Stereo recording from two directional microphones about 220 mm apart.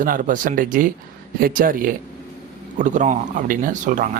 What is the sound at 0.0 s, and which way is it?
Speech, 35° right (ahead or behind).